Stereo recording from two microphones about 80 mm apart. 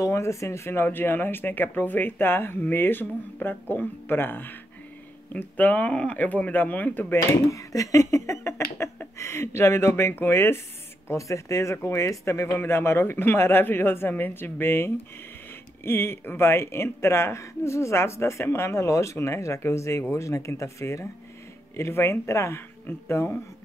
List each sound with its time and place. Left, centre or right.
0.0 s speech: left
7.4 s speech: left